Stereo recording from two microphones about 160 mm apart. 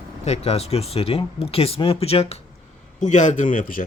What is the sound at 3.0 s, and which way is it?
Speech, 50° left (ahead or behind).